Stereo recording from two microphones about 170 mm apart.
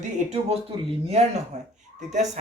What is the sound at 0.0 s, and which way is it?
Speech, 40° right (ahead or behind).